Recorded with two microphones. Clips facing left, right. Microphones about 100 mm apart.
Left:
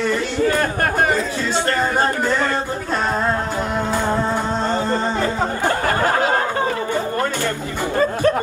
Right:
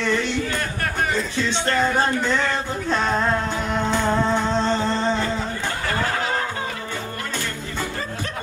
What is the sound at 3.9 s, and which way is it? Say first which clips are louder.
Music: even; 45° left (ahead or behind).